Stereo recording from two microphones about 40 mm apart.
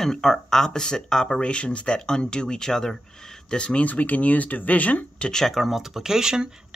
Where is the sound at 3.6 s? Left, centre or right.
Left.